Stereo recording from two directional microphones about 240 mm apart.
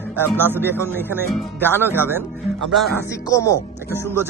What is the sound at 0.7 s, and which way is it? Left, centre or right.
Speech, centre.